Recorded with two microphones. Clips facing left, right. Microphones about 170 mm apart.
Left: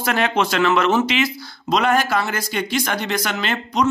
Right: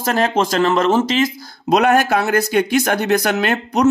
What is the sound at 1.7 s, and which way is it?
Speech, 50° right (ahead or behind).